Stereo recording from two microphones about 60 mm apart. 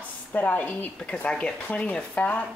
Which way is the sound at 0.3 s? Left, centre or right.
Left.